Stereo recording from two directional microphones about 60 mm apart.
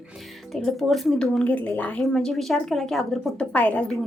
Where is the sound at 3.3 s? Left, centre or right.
Left.